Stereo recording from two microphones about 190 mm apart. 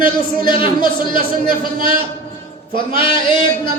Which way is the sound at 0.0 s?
25° left (ahead or behind).